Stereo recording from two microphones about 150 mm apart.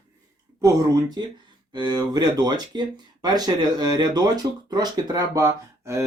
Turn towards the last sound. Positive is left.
turn(degrees=-20)  # may be behind; listen again after turning